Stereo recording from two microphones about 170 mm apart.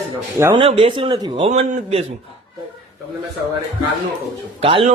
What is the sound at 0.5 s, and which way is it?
Speech, 30° right (ahead or behind).